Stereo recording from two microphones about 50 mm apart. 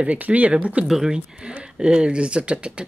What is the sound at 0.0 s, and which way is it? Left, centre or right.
Speech, right.